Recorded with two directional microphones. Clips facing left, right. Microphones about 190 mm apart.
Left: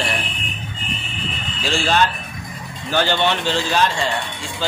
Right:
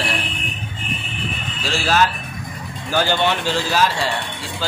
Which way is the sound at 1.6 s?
5° right (ahead or behind).